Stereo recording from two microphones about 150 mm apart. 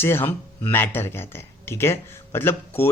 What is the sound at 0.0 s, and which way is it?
Speech, 15° left (ahead or behind).